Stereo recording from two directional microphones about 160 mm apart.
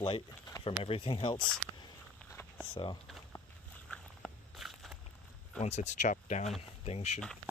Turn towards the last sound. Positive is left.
turn(degrees=40)  # may be behind; listen again after turning